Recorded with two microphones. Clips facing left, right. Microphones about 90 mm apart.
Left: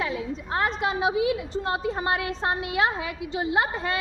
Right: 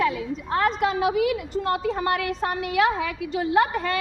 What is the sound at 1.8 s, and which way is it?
A woman's voice, 25° left (ahead or behind).